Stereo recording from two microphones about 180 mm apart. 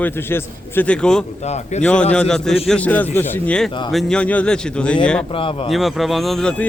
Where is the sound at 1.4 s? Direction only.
40° left (ahead or behind).